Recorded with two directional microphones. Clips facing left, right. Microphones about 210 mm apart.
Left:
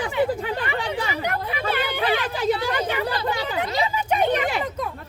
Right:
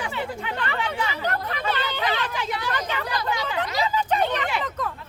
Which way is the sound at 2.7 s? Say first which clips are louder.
Left 4 dB; 10° left (ahead or behind).